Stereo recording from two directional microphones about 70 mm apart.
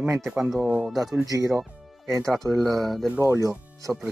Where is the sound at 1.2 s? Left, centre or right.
Right.